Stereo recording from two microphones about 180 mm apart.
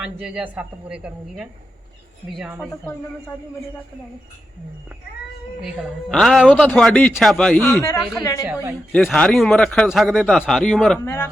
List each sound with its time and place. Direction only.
0.0 s a man's voice: 5° right (ahead or behind)
5.6 s a man's voice: centre (ahead or behind); by 8.4 s 20° left (ahead or behind)
8.9 s a man's voice: 5° left (ahead or behind)
11.0 s speech: 15° left (ahead or behind)